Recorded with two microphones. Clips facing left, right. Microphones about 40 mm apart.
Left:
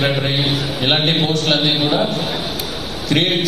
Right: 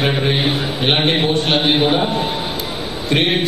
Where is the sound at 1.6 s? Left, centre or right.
Right.